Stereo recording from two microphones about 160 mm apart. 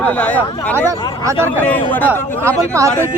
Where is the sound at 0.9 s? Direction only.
20° right (ahead or behind).